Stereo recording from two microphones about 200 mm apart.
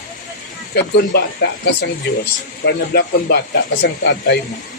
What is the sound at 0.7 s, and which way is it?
Speech, 55° left (ahead or behind).